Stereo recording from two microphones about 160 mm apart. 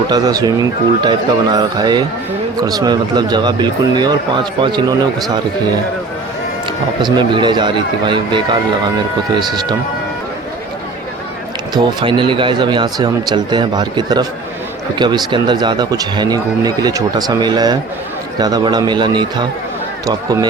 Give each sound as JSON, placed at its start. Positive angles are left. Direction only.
{"t": 0.1, "sound": "speech", "side_deg": -25}
{"t": 7.0, "sound": "speech", "side_deg": -30}
{"t": 11.7, "sound": "speech", "side_deg": -25}